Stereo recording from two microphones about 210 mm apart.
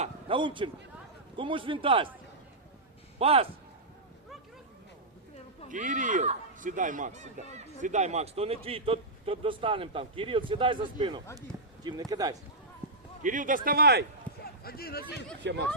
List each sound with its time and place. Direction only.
0.0 s a sound: 25° right (ahead or behind)
1.4 s a man's voice: 25° right (ahead or behind)
3.2 s a man's voice: 25° right (ahead or behind)
5.6 s a man's voice: 35° right (ahead or behind); by 12.4 s 15° right (ahead or behind)
13.2 s a man's voice: 40° right (ahead or behind)
14.4 s speech: 45° left (ahead or behind)